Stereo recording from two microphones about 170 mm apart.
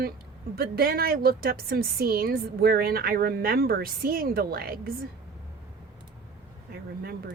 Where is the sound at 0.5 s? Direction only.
65° right (ahead or behind).